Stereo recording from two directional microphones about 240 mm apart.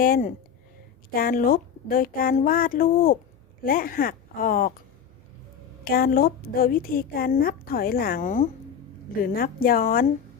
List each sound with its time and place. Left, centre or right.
0.0 s a woman's voice: left
5.8 s a woman's voice: left